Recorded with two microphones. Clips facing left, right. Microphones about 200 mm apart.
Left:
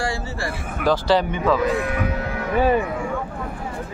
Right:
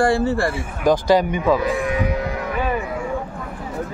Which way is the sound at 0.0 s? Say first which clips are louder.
Right 9 dB; 55° right (ahead or behind).